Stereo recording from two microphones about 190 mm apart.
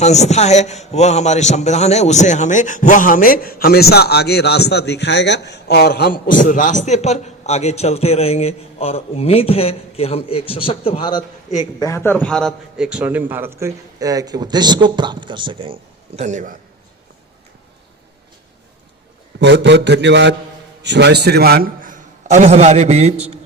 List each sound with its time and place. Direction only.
0.0 s a man's voice: 35° left (ahead or behind)
11.8 s a man's voice: 15° left (ahead or behind); by 16.6 s 40° right (ahead or behind)
19.4 s a man's voice: 65° right (ahead or behind); by 23.4 s 35° right (ahead or behind)